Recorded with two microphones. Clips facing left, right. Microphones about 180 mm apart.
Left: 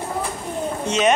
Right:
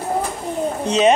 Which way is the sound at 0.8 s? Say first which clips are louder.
Right 4 dB; 35° right (ahead or behind).